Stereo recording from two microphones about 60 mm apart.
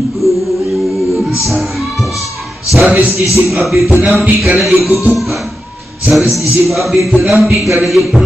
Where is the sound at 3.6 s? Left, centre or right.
Centre.